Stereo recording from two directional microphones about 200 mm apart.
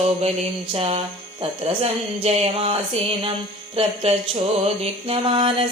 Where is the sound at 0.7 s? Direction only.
30° right (ahead or behind).